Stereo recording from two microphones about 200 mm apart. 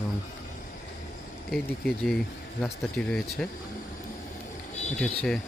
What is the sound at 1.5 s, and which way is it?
Speech, centre (ahead or behind).